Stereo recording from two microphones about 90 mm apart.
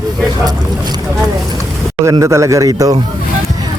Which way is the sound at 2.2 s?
35° right (ahead or behind).